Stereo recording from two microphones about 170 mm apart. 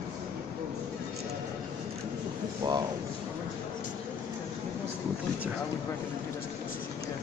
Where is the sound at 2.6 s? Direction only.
25° right (ahead or behind).